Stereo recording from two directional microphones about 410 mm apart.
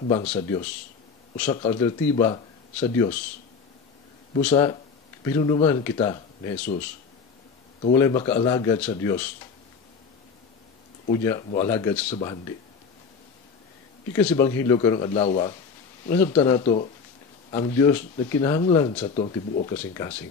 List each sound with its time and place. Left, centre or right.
0.1 s speech: centre
4.4 s speech: centre
7.8 s speech: centre
11.2 s speech: centre
14.1 s speech: centre